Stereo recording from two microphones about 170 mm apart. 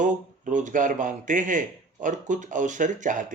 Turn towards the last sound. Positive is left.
turn(degrees=-50)  # may be behind; listen again after turning